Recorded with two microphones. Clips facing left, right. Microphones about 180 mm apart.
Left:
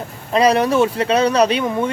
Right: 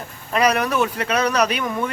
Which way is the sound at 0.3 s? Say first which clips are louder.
Left 5 dB; 30° left (ahead or behind).